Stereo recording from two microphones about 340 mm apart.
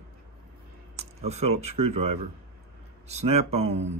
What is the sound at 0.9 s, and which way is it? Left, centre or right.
Speech, centre.